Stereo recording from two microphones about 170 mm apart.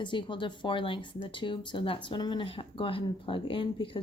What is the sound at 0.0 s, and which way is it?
Speech, 30° left (ahead or behind).